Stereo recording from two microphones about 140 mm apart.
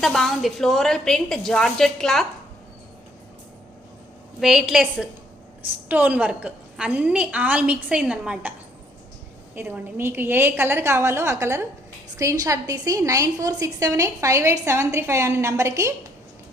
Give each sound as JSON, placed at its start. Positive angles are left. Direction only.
{"t": 0.0, "sound": "a woman's voice", "side_deg": 0}
{"t": 4.4, "sound": "a woman's voice", "side_deg": -5}
{"t": 9.6, "sound": "a woman's voice", "side_deg": -15}